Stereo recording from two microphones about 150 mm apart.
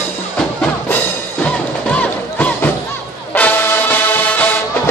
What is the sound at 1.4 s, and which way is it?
Music, 10° left (ahead or behind).